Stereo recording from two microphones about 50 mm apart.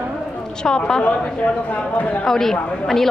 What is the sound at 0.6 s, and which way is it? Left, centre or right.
Speech, centre.